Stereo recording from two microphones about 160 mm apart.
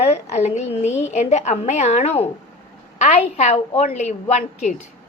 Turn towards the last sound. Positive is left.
turn(degrees=45)  # may be behind; listen again after turning